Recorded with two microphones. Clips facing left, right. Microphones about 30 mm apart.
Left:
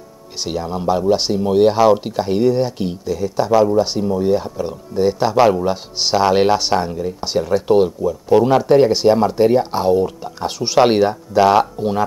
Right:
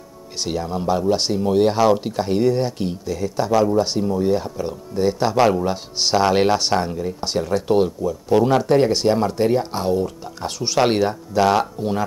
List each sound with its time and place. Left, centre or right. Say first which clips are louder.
0.4 s speech: left 1 dB; centre